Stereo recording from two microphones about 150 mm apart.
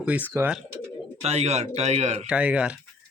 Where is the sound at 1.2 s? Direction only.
45° right (ahead or behind).